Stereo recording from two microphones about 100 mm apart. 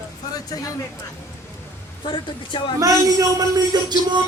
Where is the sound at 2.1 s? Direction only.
50° left (ahead or behind).